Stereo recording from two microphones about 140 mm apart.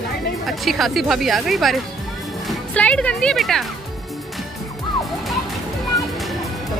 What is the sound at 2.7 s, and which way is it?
Speech, 10° left (ahead or behind).